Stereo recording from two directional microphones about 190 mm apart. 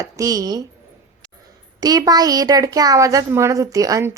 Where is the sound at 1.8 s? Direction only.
20° right (ahead or behind).